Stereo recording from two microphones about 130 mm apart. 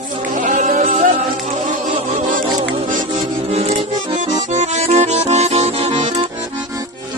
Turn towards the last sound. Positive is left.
turn(degrees=-60)  # may be behind; listen again after turning